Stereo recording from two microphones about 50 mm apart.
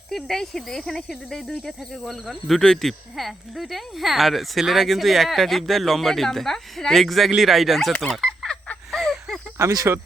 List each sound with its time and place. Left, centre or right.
0.1 s speech: centre
8.9 s a sound: centre
9.6 s speech: right